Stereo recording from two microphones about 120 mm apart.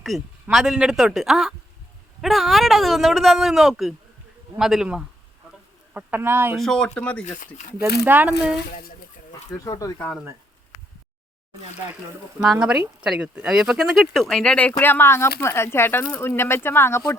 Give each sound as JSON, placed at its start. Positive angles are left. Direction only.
{"t": 0.1, "sound": "speech", "side_deg": 0}
{"t": 6.6, "sound": "speech", "side_deg": 5}
{"t": 7.3, "sound": "speech", "side_deg": 85}
{"t": 7.8, "sound": "speech", "side_deg": -15}
{"t": 9.5, "sound": "speech", "side_deg": 30}
{"t": 12.4, "sound": "speech", "side_deg": -5}